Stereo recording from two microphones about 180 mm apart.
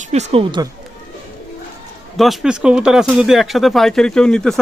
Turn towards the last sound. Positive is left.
turn(degrees=5)  # may be behind; listen again after turning